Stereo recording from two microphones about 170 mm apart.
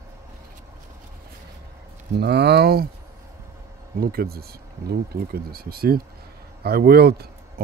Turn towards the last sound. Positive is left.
turn(degrees=-70)  # may be behind; listen again after turning